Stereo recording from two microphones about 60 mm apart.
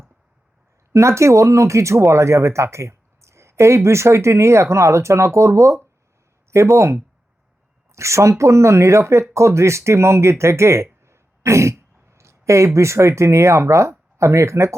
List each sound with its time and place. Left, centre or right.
0.9 s speech: right
11.0 s throat clearing: right
14.2 s speech: right